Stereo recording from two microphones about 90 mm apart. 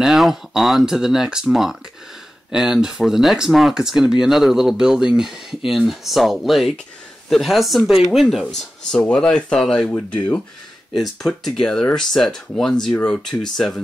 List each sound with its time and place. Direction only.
0.0 s speech: 5° right (ahead or behind); by 10.2 s 10° left (ahead or behind)
10.9 s speech: centre (ahead or behind)